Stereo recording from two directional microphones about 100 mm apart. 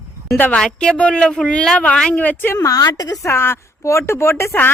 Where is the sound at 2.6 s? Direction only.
35° left (ahead or behind).